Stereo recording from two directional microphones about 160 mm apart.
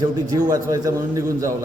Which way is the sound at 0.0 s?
20° right (ahead or behind).